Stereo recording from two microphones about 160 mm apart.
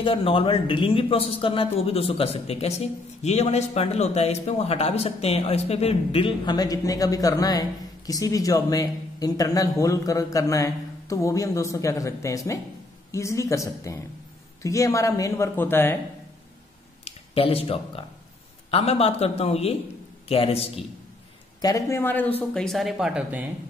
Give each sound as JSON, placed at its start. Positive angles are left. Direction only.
{"t": 0.0, "sound": "speech", "side_deg": 35}
{"t": 17.0, "sound": "speech", "side_deg": 40}
{"t": 21.5, "sound": "a woman's voice", "side_deg": 20}
{"t": 22.5, "sound": "speech", "side_deg": 0}